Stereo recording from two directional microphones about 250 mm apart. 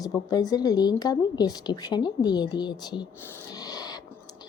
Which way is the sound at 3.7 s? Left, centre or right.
Centre.